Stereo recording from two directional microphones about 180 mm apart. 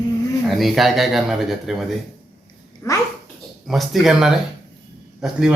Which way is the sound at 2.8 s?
15° left (ahead or behind).